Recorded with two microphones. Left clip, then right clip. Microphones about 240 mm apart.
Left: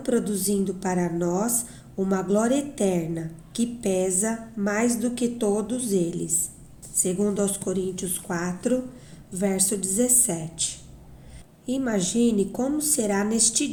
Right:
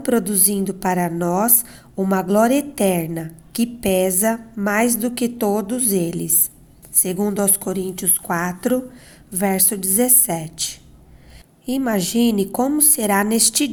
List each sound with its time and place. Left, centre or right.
0.0 s a woman's voice: right